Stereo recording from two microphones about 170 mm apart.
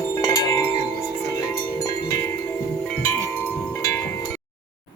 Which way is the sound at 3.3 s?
15° left (ahead or behind).